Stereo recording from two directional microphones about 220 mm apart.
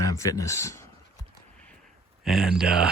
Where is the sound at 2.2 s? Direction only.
Centre (ahead or behind).